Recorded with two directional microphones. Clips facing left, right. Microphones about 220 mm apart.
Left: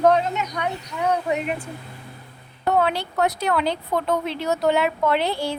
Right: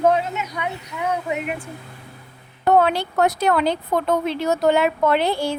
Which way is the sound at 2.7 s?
50° right (ahead or behind).